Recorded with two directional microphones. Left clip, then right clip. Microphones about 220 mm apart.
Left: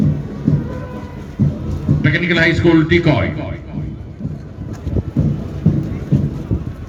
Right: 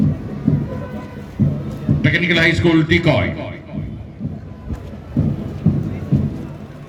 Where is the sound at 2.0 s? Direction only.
50° right (ahead or behind).